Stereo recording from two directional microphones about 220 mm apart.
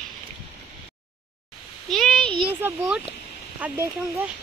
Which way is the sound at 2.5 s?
10° right (ahead or behind).